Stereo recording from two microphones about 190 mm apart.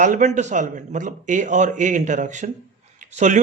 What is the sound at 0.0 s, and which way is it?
A man's voice, 40° right (ahead or behind).